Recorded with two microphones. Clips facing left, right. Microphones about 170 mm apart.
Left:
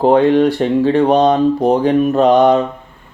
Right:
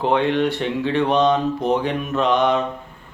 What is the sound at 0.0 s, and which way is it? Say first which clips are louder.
Speech: left 8 dB; 40° left (ahead or behind).